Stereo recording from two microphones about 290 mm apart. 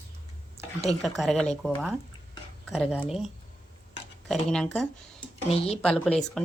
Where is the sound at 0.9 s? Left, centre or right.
Centre.